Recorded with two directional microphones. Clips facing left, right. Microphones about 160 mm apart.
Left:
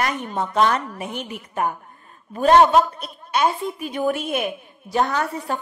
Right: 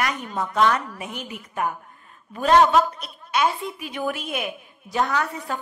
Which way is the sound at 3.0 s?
40° left (ahead or behind).